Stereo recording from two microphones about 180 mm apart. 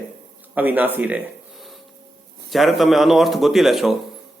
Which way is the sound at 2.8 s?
Centre (ahead or behind).